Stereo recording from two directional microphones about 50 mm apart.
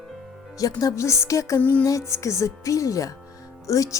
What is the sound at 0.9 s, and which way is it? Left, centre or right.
Speech, left.